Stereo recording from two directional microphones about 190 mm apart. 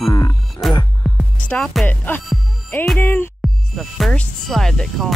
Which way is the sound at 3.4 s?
Centre (ahead or behind).